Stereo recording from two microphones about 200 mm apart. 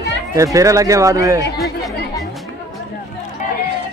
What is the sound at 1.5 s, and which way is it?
Speech, centre (ahead or behind).